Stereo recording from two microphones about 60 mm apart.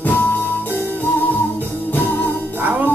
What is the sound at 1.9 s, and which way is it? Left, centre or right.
Music, left.